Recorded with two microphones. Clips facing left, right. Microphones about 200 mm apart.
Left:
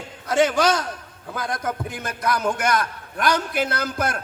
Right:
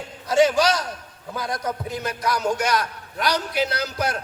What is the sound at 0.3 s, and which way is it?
A man's voice, 55° left (ahead or behind).